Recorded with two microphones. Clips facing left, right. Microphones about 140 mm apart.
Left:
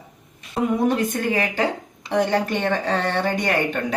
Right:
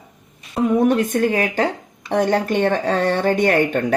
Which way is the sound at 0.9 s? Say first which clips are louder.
Right 4 dB; 55° right (ahead or behind).